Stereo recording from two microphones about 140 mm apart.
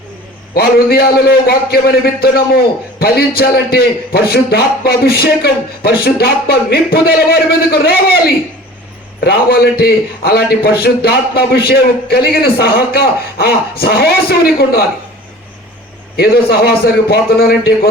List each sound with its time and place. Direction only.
0.5 s a man's voice: 90° left
9.3 s a man's voice: 90° left
16.1 s a man's voice: 90° left